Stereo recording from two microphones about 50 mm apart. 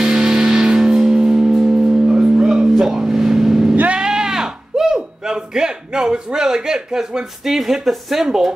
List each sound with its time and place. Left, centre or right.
0.0 s music: centre
2.5 s vehicle: centre
3.7 s sheep: right
4.0 s sheep: centre